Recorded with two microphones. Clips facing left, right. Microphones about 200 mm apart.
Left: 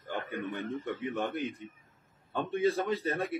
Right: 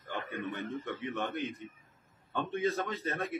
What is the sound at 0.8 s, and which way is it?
Speech, 5° left (ahead or behind).